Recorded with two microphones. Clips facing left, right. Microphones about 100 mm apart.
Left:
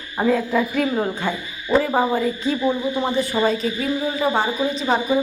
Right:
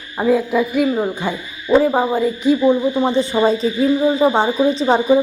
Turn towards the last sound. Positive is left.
turn(degrees=-30)  # may be behind; listen again after turning